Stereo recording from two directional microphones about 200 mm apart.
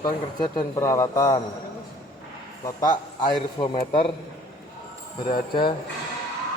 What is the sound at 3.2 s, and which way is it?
Speech, 20° left (ahead or behind).